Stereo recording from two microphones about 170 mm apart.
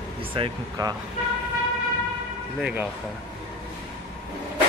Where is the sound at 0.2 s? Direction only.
30° right (ahead or behind).